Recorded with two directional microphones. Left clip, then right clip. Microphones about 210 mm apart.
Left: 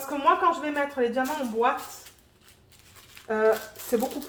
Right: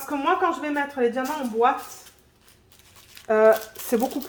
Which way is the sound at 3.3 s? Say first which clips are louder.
Right 6 dB; 55° right (ahead or behind).